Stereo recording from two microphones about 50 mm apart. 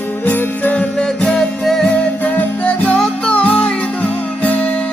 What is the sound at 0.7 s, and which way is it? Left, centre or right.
Music, left.